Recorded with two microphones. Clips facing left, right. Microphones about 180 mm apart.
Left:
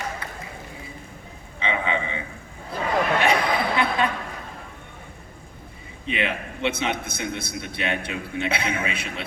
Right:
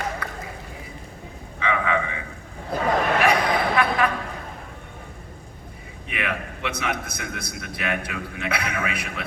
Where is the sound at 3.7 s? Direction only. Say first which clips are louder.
Right 2 dB; 25° left (ahead or behind).